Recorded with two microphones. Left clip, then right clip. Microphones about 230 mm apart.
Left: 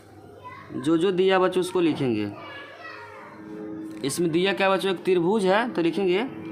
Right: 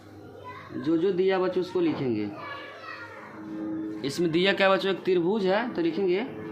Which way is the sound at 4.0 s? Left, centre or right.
Left.